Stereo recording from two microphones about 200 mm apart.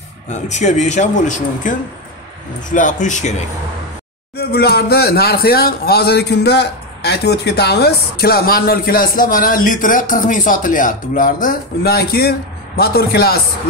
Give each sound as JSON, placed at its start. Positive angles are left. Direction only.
{"t": 0.3, "sound": "a man's voice", "side_deg": 35}
{"t": 4.4, "sound": "speech", "side_deg": 50}